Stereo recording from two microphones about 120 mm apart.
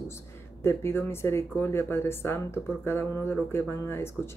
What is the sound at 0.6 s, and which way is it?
Speech, 20° left (ahead or behind).